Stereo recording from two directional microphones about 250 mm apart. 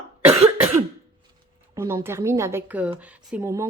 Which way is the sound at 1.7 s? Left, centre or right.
Centre.